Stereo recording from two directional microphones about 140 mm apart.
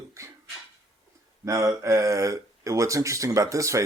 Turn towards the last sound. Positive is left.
turn(degrees=-20)  # may be behind; listen again after turning